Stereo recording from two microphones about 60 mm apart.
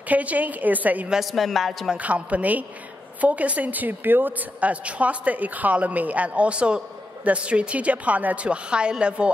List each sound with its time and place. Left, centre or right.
0.1 s a woman's voice: right
1.2 s speech: centre
2.0 s a woman's voice: right